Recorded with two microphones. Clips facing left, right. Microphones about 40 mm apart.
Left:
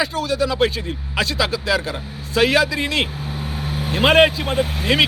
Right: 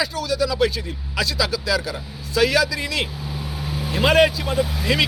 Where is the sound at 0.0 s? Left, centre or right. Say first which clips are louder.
Left 2 dB; left.